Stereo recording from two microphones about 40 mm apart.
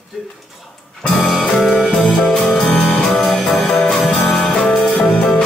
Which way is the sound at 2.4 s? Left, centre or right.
Centre.